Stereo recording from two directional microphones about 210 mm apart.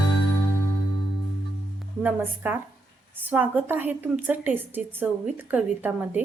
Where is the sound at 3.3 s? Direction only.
10° right (ahead or behind).